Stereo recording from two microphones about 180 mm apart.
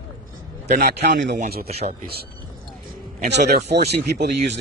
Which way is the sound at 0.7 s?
65° right (ahead or behind).